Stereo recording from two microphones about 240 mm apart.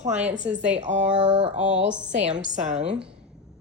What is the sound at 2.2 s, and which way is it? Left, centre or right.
Speech, right.